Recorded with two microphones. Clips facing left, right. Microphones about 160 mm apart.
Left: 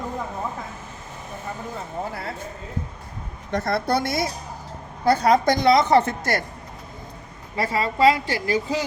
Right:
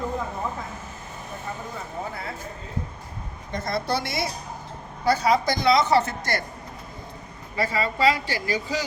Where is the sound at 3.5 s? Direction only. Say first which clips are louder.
Left 4 dB; 60° left (ahead or behind).